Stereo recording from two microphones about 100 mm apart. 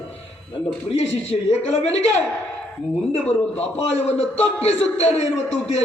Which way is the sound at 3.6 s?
90° left.